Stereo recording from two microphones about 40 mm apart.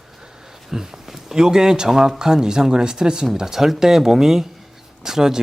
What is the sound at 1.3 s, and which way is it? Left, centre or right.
Speech, centre.